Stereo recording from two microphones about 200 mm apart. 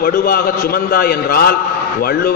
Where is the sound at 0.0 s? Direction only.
50° left (ahead or behind).